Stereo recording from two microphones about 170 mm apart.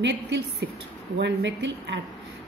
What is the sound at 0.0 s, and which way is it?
A woman's voice, 90° right.